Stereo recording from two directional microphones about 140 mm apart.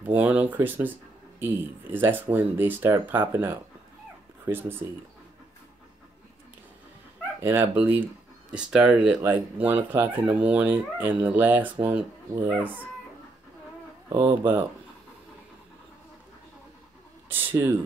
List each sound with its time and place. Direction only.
0.0 s speech: 10° right (ahead or behind)
7.4 s speech: 20° right (ahead or behind)
8.5 s speech: 5° right (ahead or behind)
14.0 s speech: 15° right (ahead or behind)
17.3 s speech: 15° right (ahead or behind)